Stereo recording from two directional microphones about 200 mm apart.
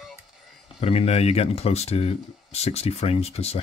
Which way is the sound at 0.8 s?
30° left (ahead or behind).